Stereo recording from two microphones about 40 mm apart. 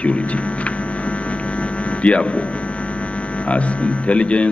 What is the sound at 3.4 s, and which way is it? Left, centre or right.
Speech, left.